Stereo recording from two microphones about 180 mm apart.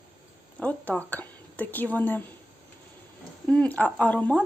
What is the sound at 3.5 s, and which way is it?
Speech, 5° left (ahead or behind).